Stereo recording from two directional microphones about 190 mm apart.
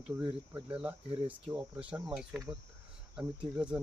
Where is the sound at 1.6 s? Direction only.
5° right (ahead or behind).